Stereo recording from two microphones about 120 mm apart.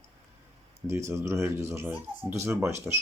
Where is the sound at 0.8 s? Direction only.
25° right (ahead or behind).